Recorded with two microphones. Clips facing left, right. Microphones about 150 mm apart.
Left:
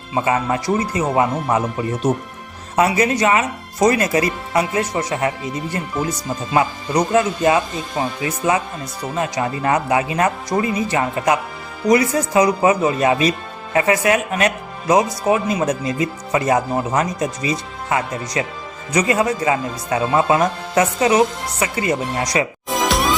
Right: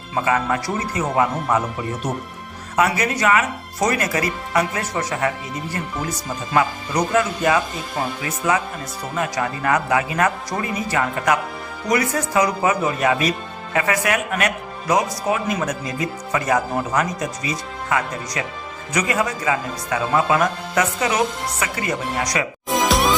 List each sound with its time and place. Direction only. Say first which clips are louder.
0.3 s speech: left 2 dB; 25° left (ahead or behind)
6.5 s speech: left 2 dB; 20° left (ahead or behind)
22.7 s music: right 1 dB; centre (ahead or behind)